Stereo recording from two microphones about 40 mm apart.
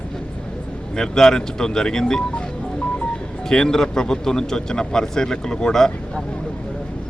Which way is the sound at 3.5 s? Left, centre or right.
Centre.